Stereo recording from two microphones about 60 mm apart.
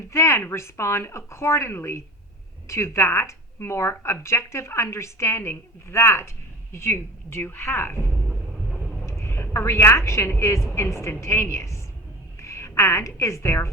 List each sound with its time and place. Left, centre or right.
0.1 s a woman's voice: left